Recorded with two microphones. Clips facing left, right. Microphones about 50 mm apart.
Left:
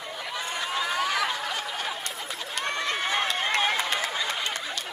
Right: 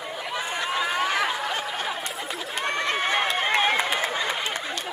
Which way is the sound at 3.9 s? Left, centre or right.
Centre.